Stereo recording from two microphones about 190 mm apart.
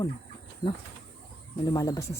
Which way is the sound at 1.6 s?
20° left (ahead or behind).